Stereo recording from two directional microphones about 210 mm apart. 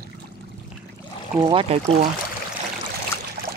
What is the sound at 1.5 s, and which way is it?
Speech, 25° right (ahead or behind).